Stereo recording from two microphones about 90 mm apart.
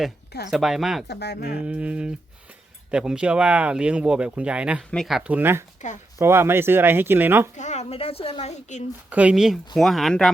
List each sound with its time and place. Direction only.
0.5 s speech: centre (ahead or behind)
1.6 s speech: 15° right (ahead or behind)
4.8 s speech: 5° left (ahead or behind)
5.1 s speech: 10° right (ahead or behind)
5.4 s speech: 25° right (ahead or behind)
7.9 s speech: 90° left
9.0 s speech: 15° right (ahead or behind)
9.3 s speech: 5° right (ahead or behind)